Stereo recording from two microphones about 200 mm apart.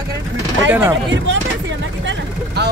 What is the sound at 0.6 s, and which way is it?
Speech, 10° right (ahead or behind).